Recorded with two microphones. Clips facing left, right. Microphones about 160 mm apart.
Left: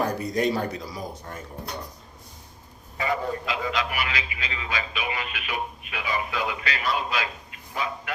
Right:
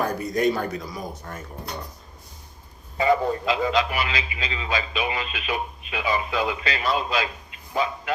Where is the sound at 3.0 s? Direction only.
30° right (ahead or behind).